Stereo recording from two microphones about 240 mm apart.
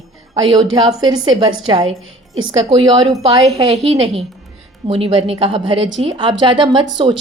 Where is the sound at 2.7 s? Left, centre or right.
Right.